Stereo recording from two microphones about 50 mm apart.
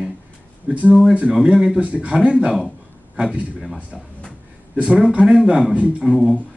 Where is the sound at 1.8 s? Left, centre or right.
Right.